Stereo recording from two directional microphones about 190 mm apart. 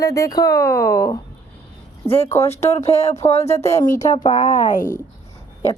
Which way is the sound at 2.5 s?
35° left (ahead or behind).